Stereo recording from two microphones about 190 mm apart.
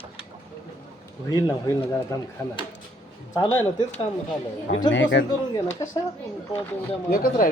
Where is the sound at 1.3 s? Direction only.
20° left (ahead or behind).